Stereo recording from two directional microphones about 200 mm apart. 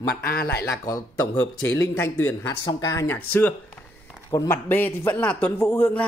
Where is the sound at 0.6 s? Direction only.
15° left (ahead or behind).